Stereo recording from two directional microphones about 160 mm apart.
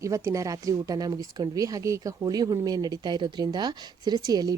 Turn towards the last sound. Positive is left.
turn(degrees=-25)  # may be behind; listen again after turning